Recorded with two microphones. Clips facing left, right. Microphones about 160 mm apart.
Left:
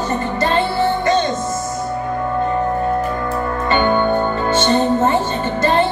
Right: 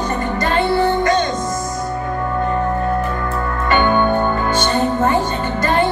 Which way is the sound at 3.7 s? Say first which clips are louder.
Right 1 dB; 25° left (ahead or behind).